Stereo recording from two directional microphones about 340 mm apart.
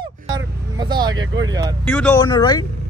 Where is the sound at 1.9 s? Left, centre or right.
Centre.